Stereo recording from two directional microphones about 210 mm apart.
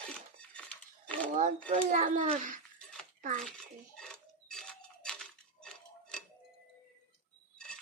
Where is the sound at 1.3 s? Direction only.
35° right (ahead or behind).